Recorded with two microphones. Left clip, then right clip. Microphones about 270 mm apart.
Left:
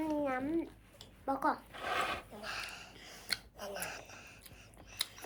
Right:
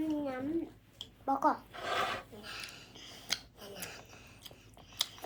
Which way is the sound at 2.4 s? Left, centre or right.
Centre.